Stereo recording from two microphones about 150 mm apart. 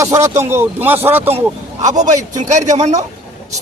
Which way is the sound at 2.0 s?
55° right (ahead or behind).